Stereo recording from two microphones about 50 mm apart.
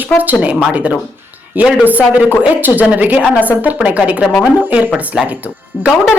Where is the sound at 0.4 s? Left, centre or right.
Right.